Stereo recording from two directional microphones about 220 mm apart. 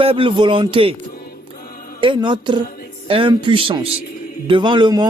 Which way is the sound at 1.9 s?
20° right (ahead or behind).